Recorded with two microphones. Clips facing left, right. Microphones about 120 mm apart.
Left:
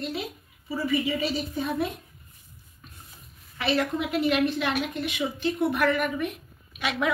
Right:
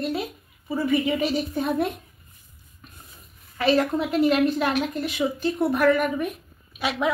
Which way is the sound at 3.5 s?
45° right (ahead or behind).